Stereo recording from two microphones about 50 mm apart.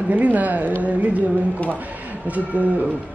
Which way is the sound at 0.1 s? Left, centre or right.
Right.